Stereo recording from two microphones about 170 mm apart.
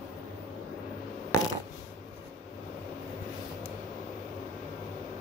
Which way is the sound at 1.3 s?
20° left (ahead or behind).